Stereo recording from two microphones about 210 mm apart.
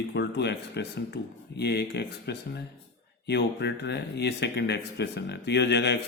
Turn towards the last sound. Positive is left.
turn(degrees=55)  # may be behind; listen again after turning